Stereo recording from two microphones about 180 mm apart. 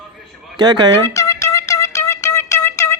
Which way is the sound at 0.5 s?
25° right (ahead or behind).